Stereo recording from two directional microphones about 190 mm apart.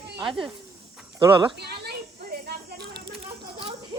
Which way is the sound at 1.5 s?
60° right (ahead or behind).